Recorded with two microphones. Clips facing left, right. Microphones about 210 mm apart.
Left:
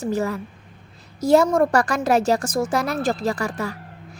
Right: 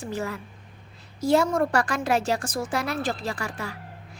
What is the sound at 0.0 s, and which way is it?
A woman's voice, 40° left (ahead or behind).